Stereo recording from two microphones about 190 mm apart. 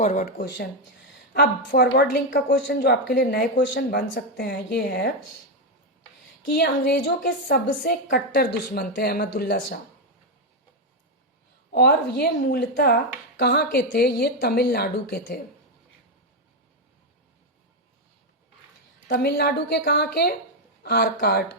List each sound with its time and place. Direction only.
0.0 s speech: 40° left (ahead or behind)
0.3 s speech: 65° left (ahead or behind)
6.5 s speech: 60° left (ahead or behind)
11.7 s speech: 60° left (ahead or behind)
19.0 s speech: 60° left (ahead or behind)